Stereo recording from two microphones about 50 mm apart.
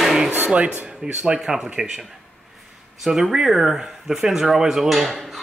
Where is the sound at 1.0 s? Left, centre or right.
Centre.